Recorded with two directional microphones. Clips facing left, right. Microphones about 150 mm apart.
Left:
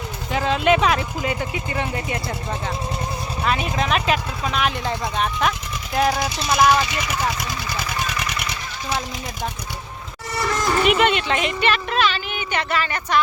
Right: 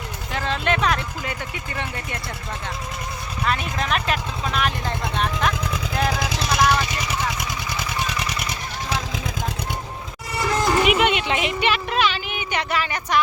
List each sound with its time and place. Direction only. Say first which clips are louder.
0.3 s speech: left 5 dB; 10° left (ahead or behind)
3.4 s speech: left 2 dB; centre (ahead or behind)
6.0 s vehicle: left 5 dB; 5° left (ahead or behind)
6.4 s vehicle: left 3 dB; 90° right
6.8 s vehicle: left 1 dB; 35° right (ahead or behind)
7.3 s vehicle: left 1 dB; 20° right (ahead or behind); by 8.5 s 35° right (ahead or behind)
10.5 s a sound: even; 10° right (ahead or behind)